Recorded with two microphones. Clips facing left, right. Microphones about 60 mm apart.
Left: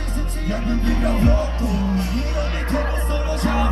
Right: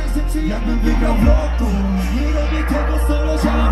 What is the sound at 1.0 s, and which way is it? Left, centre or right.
Music, centre.